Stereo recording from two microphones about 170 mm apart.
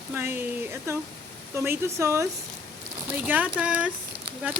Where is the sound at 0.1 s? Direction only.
10° right (ahead or behind).